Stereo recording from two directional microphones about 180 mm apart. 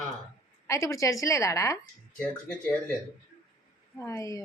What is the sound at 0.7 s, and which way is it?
A woman's voice, 15° left (ahead or behind).